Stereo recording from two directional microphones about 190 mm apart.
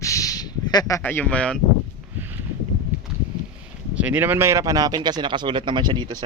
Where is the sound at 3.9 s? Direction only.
10° right (ahead or behind).